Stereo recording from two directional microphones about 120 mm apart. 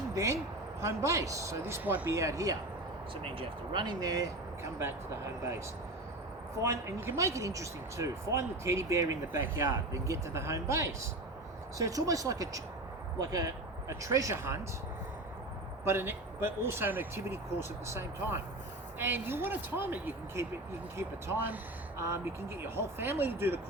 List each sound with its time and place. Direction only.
0.1 s a sound: 25° right (ahead or behind)
0.8 s speech: 25° right (ahead or behind)
2.1 s speech: 25° right (ahead or behind)
3.3 s speech: 40° right (ahead or behind)
6.6 s speech: 25° right (ahead or behind)
15.8 s speech: 20° right (ahead or behind)